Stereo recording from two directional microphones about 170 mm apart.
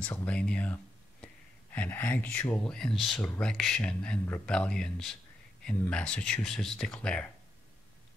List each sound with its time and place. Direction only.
0.0 s speech: 10° left (ahead or behind)